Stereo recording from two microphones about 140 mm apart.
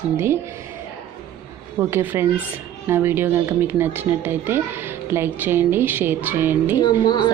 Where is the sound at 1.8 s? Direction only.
15° right (ahead or behind).